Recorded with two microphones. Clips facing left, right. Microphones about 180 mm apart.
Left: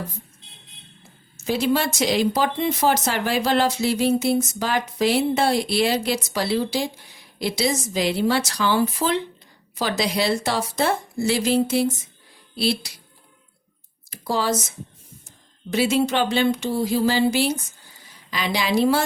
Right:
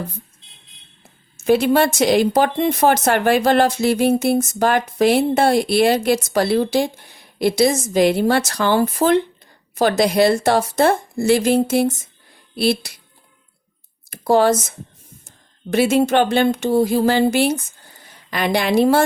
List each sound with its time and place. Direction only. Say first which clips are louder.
1.4 s speech: right 7 dB; 55° right (ahead or behind)
14.1 s speech: right 9 dB; 55° right (ahead or behind)